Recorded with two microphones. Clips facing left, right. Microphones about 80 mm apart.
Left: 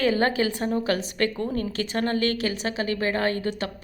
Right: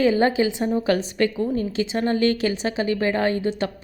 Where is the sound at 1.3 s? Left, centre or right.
Centre.